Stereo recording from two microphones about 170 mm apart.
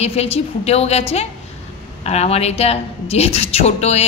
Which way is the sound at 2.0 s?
35° left (ahead or behind).